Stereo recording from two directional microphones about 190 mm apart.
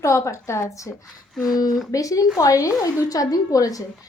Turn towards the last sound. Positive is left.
turn(degrees=20)  # may be behind; listen again after turning